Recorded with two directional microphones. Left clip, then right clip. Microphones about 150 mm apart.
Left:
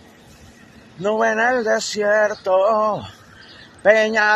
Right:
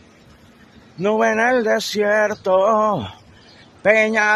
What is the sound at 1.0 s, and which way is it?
Male singing, 55° right (ahead or behind).